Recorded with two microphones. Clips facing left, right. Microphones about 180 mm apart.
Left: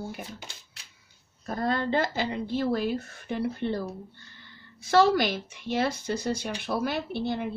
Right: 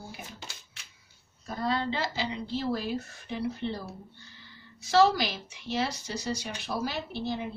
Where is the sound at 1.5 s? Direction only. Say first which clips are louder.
Left 3 dB; 50° left (ahead or behind).